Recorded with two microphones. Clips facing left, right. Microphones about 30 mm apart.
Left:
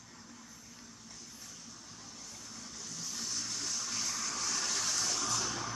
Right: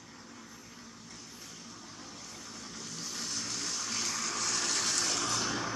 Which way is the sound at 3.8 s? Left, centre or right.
Right.